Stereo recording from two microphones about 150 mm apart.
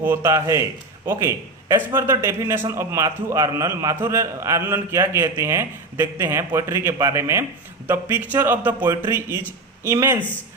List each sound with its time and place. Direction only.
0.0 s a man's voice: 15° right (ahead or behind)